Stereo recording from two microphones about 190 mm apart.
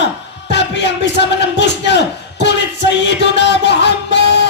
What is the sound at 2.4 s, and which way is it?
Music, 65° left (ahead or behind).